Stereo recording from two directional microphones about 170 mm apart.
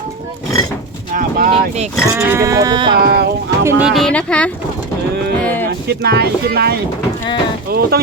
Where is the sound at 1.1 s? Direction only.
55° right (ahead or behind).